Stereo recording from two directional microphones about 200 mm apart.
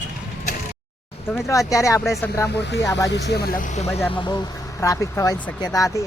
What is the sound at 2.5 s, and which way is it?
Speech, 60° left (ahead or behind).